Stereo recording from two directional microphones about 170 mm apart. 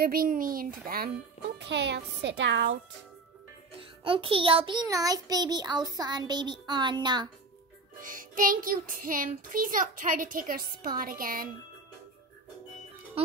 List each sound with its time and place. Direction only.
0.0 s a child's voice: 60° right (ahead or behind)
1.6 s a child's voice: 90° right
3.7 s music: 30° right (ahead or behind)
8.0 s child singing: 55° right (ahead or behind)